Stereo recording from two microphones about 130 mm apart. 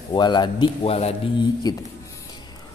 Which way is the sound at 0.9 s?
55° left (ahead or behind).